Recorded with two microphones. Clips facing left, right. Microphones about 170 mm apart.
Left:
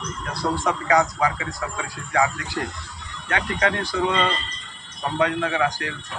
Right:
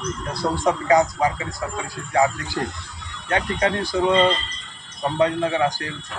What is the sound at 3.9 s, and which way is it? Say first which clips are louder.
Speech: right 4 dB; 25° right (ahead or behind).